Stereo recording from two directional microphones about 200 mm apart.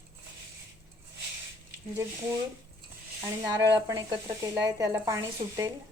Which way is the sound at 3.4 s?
20° right (ahead or behind).